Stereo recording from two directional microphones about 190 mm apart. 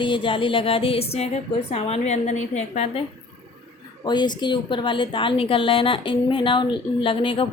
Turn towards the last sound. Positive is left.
turn(degrees=30)  # may be behind; listen again after turning